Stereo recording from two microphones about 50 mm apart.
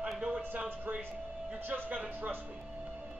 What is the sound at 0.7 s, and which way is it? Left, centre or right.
Speech, right.